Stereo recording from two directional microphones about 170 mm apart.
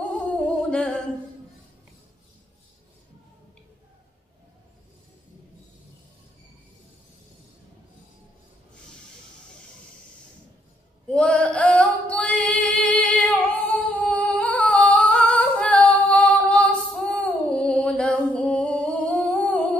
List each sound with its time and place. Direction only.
0.6 s music: 5° left (ahead or behind)
11.1 s music: 5° left (ahead or behind)